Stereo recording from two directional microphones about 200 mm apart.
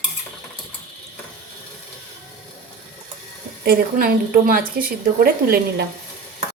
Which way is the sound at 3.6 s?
50° right (ahead or behind).